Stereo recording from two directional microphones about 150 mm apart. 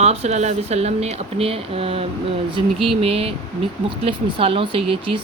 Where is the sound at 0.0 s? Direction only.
45° right (ahead or behind).